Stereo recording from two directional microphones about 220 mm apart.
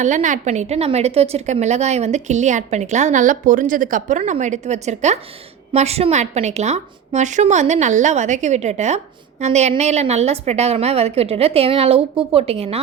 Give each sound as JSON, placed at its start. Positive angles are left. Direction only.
{"t": 0.0, "sound": "a woman's voice", "side_deg": -35}